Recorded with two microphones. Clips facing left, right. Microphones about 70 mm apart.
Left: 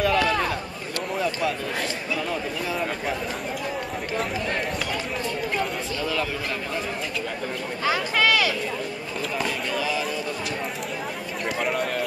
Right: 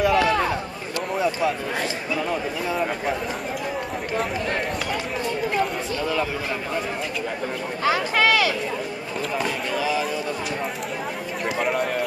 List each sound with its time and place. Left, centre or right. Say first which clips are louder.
0.0 s a sound: right 3 dB; centre
2.1 s speech: right 3 dB; centre
7.8 s speech: right 2 dB; right
9.4 s speech: right 1 dB; centre
11.4 s speech: right 2 dB; centre